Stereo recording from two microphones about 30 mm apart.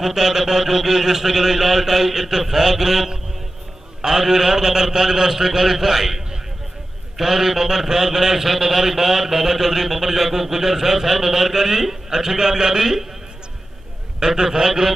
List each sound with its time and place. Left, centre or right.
0.0 s a man's voice: centre
14.2 s a man's voice: right